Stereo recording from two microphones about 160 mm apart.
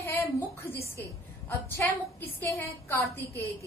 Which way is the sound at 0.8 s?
15° left (ahead or behind).